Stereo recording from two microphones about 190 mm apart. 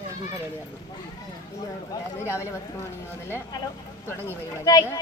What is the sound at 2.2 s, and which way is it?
Speech, 15° left (ahead or behind).